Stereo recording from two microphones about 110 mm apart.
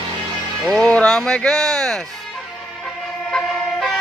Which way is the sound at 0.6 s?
5° left (ahead or behind).